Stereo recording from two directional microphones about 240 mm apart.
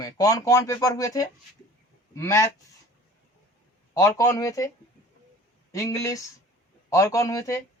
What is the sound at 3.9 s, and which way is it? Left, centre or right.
Speech, centre.